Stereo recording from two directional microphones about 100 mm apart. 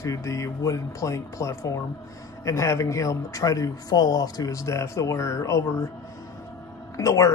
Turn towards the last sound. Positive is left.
turn(degrees=35)  # may be behind; listen again after turning